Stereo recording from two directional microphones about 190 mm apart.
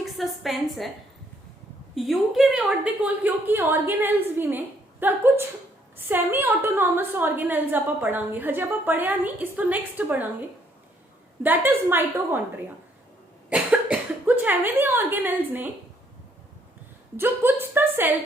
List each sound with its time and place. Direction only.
0.0 s a woman's voice: centre (ahead or behind)
2.0 s a woman's voice: centre (ahead or behind)
11.4 s a woman's voice: 10° right (ahead or behind)
13.5 s speech: 5° right (ahead or behind)
17.2 s a woman's voice: 10° right (ahead or behind)